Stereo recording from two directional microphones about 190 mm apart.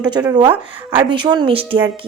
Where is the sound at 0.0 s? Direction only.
20° right (ahead or behind).